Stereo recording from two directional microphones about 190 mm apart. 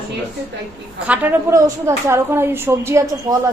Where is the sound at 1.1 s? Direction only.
15° right (ahead or behind).